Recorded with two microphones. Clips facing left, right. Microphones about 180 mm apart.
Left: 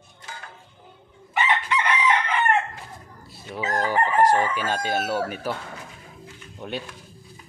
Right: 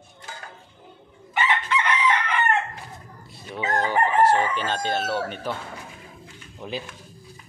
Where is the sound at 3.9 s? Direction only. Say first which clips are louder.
Even; 15° left (ahead or behind).